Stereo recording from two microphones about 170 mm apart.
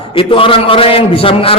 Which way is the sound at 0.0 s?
30° left (ahead or behind).